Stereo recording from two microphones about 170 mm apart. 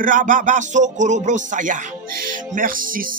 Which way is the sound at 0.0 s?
50° right (ahead or behind).